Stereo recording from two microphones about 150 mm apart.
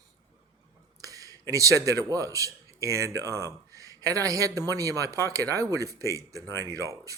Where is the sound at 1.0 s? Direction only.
25° right (ahead or behind).